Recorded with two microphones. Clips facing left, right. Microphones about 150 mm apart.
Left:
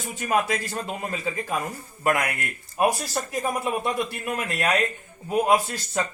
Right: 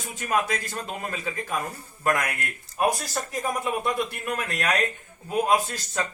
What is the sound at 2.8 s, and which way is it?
Speech, 5° left (ahead or behind).